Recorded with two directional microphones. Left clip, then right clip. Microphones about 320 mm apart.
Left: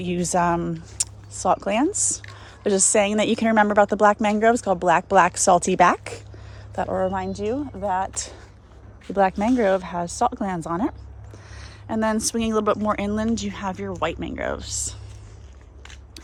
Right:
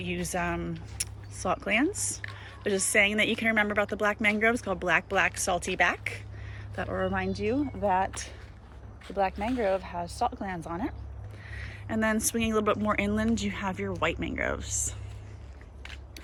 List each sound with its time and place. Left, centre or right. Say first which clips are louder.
0.0 s a woman's voice: left 10 dB; centre
6.7 s a woman's voice: left 7 dB; centre
9.1 s a woman's voice: left 9 dB; left
15.8 s biting: left 2 dB; centre